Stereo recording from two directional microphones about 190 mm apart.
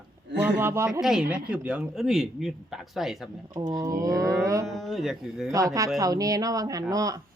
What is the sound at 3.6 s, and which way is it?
Speech, 15° right (ahead or behind).